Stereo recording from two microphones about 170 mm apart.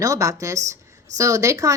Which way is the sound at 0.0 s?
20° right (ahead or behind).